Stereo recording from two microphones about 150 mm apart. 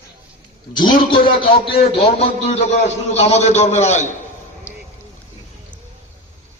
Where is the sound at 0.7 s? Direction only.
30° left (ahead or behind); by 4.1 s 50° left (ahead or behind).